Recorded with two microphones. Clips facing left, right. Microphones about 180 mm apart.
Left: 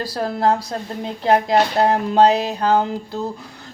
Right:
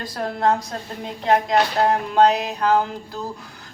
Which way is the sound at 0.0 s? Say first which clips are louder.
Left 2 dB; 35° left (ahead or behind).